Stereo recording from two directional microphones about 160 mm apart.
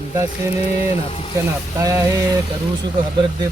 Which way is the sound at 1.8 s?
20° right (ahead or behind).